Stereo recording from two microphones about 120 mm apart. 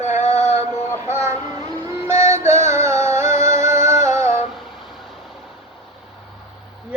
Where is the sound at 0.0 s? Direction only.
70° left (ahead or behind).